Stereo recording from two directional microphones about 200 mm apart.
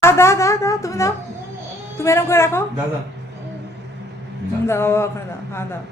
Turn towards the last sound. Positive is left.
turn(degrees=10)  # may be behind; listen again after turning